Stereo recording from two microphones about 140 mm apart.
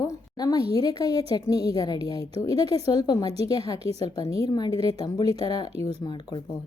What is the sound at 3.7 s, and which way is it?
Speech, 45° right (ahead or behind).